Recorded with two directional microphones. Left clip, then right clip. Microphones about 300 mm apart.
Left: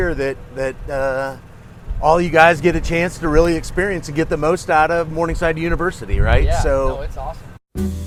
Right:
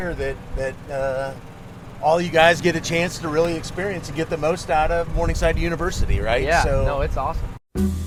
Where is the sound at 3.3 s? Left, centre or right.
Left.